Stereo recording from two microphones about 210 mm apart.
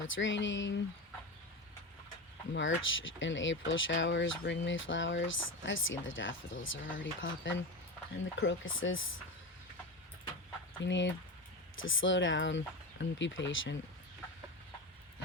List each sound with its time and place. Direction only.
0.1 s speech: 60° left (ahead or behind)
2.5 s speech: 65° left (ahead or behind)
10.8 s speech: 60° left (ahead or behind)